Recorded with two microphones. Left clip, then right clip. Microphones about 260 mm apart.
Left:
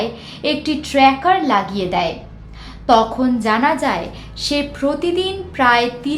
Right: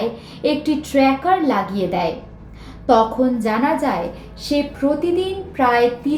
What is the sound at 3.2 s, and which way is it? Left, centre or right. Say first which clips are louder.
Speech: right 1 dB; centre.